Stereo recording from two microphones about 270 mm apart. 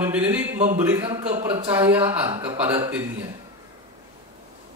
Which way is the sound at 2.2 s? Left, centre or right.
Centre.